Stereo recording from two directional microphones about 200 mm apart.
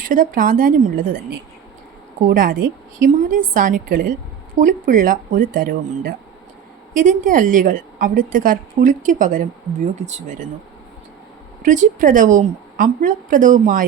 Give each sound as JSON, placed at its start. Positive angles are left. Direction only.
{"t": 0.0, "sound": "a woman's voice", "side_deg": -40}
{"t": 2.2, "sound": "a woman's voice", "side_deg": -45}
{"t": 11.6, "sound": "a woman's voice", "side_deg": -40}